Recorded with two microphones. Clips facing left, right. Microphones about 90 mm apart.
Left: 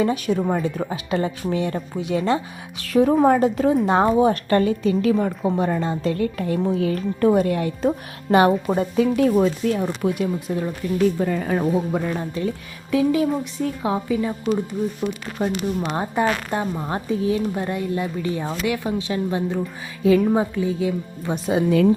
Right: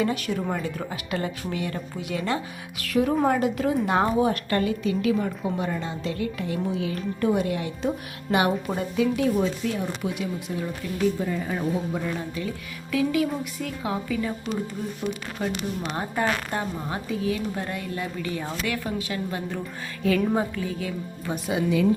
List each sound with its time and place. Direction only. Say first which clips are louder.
0.0 s a woman's voice: left 5 dB; 20° left (ahead or behind)
9.1 s speech: left 6 dB; 50° left (ahead or behind)
12.1 s a woman's voice: left 5 dB; 35° left (ahead or behind)
15.4 s a woman's voice: left 8 dB; 30° left (ahead or behind)
16.9 s a woman's voice: left 6 dB; 30° left (ahead or behind)